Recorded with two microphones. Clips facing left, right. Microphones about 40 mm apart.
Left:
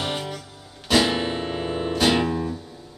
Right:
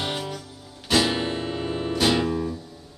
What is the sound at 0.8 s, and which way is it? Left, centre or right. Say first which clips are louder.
Guitar: left 2 dB; centre.